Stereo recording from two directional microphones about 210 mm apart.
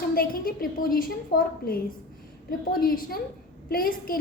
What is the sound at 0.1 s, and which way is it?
A woman's voice, 45° left (ahead or behind).